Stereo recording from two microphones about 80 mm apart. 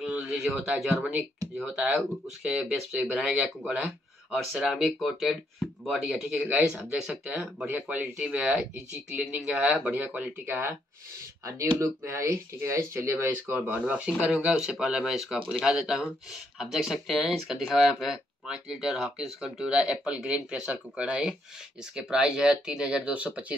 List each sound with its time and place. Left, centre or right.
0.0 s a sound: centre
1.6 s speech: centre
7.5 s speech: right
9.8 s speech: right
11.8 s speech: right; by 23.4 s centre